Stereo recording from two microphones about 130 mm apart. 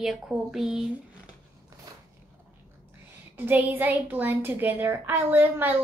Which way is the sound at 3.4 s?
15° right (ahead or behind).